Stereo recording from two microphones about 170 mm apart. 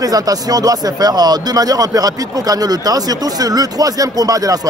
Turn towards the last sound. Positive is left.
turn(degrees=-20)  # may be behind; listen again after turning